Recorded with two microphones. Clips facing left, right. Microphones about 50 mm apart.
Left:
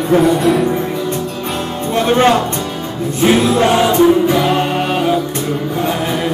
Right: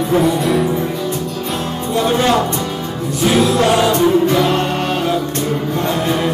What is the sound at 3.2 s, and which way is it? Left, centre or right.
Music, left.